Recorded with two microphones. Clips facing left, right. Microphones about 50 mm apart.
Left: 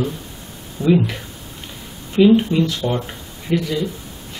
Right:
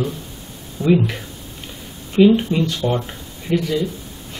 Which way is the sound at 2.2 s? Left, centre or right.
Centre.